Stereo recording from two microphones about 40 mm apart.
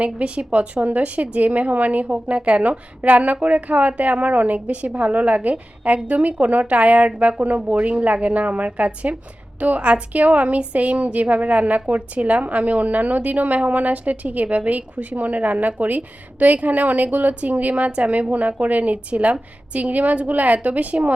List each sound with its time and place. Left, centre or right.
0.0 s a woman's voice: right